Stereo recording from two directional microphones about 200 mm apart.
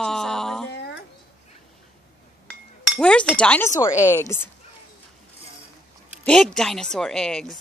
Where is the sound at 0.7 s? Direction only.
60° left (ahead or behind).